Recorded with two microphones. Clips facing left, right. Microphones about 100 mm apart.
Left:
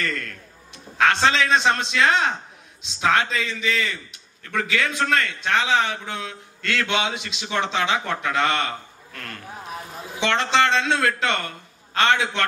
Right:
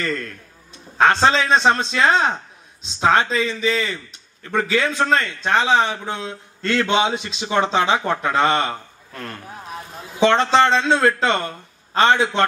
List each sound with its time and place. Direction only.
0.9 s a man's voice: 30° right (ahead or behind)